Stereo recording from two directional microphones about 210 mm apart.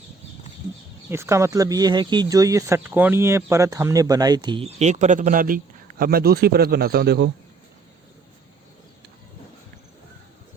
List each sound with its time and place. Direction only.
1.1 s a man's voice: 10° right (ahead or behind); by 7.3 s 50° right (ahead or behind)